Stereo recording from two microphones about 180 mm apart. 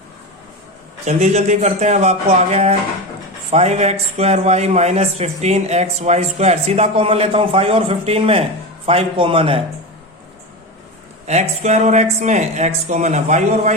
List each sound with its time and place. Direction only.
1.0 s speech: 40° right (ahead or behind)
11.3 s speech: 40° right (ahead or behind)